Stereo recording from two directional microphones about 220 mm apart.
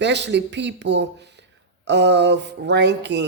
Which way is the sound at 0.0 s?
50° right (ahead or behind).